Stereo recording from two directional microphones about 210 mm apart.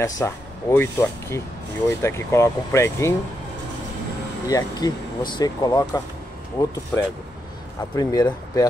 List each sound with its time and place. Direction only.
0.0 s speech: 10° left (ahead or behind)
4.5 s speech: 15° left (ahead or behind)
6.9 s speech: 5° left (ahead or behind)
7.9 s speech: 20° left (ahead or behind)